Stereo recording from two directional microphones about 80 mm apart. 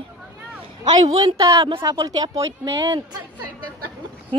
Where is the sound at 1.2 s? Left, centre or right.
Right.